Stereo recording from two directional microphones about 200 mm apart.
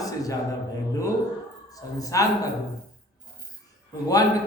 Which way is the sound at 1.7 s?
15° left (ahead or behind).